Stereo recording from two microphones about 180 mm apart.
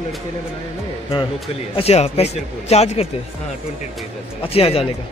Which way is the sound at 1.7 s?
35° left (ahead or behind).